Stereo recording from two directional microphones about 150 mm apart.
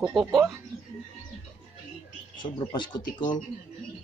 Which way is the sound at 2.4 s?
30° left (ahead or behind).